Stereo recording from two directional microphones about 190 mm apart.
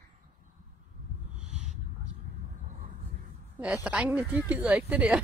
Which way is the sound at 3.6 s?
5° right (ahead or behind).